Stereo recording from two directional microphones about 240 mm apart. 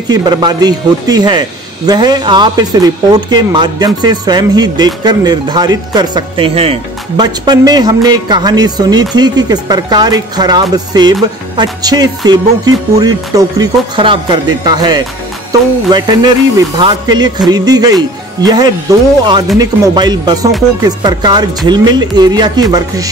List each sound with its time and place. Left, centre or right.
0.1 s speech: centre